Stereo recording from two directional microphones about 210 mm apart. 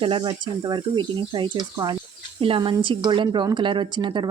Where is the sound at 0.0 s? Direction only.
25° right (ahead or behind).